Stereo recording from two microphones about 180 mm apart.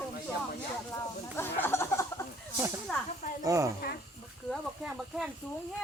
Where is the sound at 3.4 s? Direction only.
15° right (ahead or behind).